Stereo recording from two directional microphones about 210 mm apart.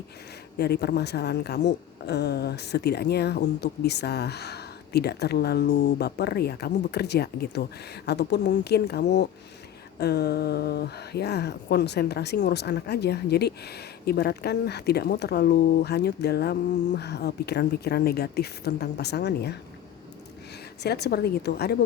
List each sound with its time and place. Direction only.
0.6 s speech: 50° left (ahead or behind)
20.8 s speech: 50° left (ahead or behind)